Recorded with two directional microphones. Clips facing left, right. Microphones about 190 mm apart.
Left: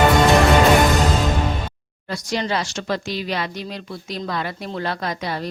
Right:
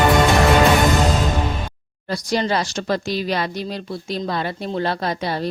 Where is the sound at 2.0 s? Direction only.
35° right (ahead or behind).